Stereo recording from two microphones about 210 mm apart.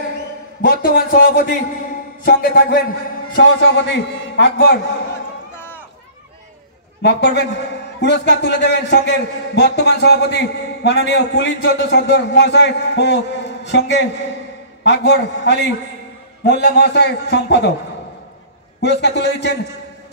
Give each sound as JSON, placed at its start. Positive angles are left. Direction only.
{"t": 0.6, "sound": "a man's voice", "side_deg": 45}
{"t": 3.3, "sound": "a man's voice", "side_deg": 60}
{"t": 7.0, "sound": "a man's voice", "side_deg": 55}
{"t": 18.8, "sound": "a man's voice", "side_deg": 55}